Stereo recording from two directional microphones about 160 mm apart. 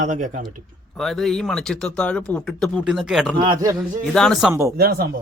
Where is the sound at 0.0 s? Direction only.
50° right (ahead or behind).